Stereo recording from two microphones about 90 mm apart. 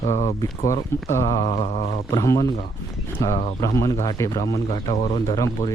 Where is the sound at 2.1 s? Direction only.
40° left (ahead or behind).